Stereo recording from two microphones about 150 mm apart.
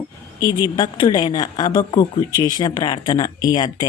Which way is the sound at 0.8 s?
30° left (ahead or behind).